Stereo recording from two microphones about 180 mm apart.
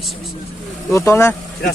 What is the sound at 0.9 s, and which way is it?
Speech, 15° left (ahead or behind).